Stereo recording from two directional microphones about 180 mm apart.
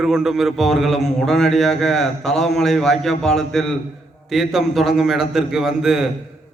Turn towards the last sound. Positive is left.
turn(degrees=0)  # may be behind; listen again after turning